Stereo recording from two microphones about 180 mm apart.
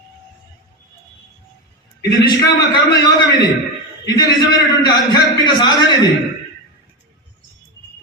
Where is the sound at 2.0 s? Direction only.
20° left (ahead or behind).